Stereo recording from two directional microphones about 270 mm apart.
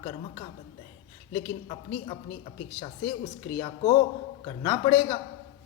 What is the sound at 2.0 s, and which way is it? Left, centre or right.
Speech, left.